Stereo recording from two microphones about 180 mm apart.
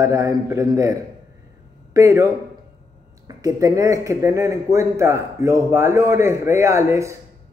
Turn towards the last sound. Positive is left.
turn(degrees=-15)  # may be behind; listen again after turning